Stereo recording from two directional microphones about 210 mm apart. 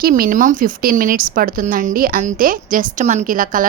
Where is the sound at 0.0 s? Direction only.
40° right (ahead or behind).